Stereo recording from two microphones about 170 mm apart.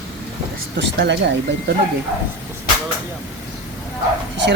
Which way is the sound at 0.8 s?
90° right.